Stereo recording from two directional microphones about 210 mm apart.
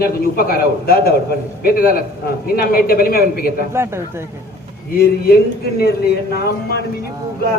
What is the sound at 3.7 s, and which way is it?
Speech, 10° right (ahead or behind).